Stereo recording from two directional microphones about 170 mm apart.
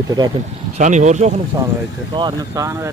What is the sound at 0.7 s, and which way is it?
Speech, 45° right (ahead or behind).